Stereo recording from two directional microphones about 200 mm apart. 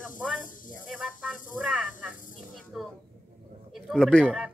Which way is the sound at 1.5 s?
5° right (ahead or behind).